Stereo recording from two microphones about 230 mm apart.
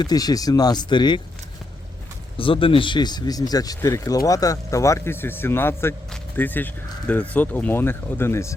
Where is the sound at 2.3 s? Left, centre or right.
Left.